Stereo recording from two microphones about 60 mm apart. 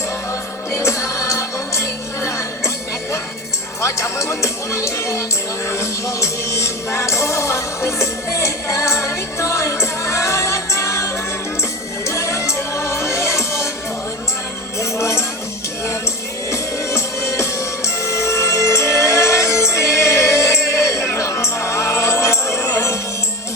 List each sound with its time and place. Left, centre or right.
0.7 s music: left
3.8 s speech: left
5.6 s music: left
14.8 s music: left
16.5 s music: left